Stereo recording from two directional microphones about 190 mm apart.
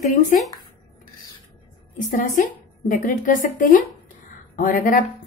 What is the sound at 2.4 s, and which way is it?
A woman's voice, 45° left (ahead or behind).